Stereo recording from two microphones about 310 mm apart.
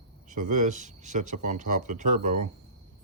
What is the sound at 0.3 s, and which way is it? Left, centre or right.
Speech, right.